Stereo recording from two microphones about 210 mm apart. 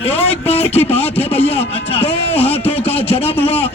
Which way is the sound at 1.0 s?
30° left (ahead or behind).